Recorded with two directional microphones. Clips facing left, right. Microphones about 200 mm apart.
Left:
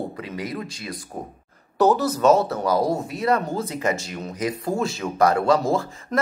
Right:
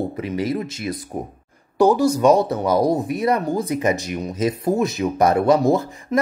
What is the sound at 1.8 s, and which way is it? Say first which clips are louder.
Speech: right 3 dB; 10° right (ahead or behind).